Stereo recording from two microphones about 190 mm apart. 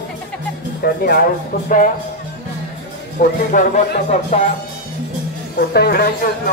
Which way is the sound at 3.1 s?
45° left (ahead or behind).